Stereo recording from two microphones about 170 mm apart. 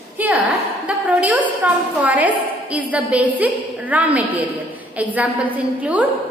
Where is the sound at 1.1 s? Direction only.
10° right (ahead or behind).